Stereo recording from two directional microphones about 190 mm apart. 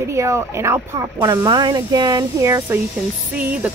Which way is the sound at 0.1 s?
15° right (ahead or behind).